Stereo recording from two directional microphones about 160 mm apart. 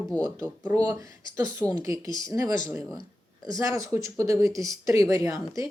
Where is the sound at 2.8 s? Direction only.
Centre (ahead or behind).